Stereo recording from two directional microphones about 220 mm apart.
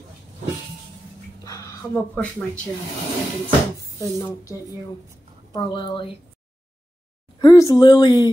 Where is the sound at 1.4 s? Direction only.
15° left (ahead or behind).